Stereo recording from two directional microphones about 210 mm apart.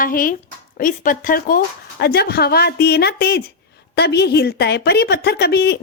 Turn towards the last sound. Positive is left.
turn(degrees=50)  # may be behind; listen again after turning